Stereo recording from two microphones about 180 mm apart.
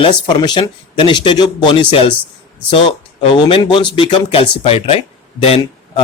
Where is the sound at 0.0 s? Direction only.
25° left (ahead or behind).